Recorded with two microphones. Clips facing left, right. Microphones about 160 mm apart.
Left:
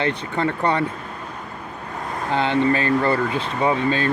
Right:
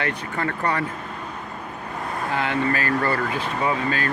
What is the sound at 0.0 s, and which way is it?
Speech, 25° left (ahead or behind).